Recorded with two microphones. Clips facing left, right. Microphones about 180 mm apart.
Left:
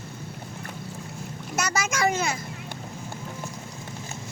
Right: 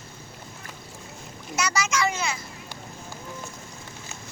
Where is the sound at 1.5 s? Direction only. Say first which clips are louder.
Right 1 dB; 50° left (ahead or behind).